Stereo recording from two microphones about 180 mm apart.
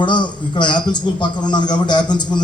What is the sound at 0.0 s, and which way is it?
A man's voice, 25° left (ahead or behind).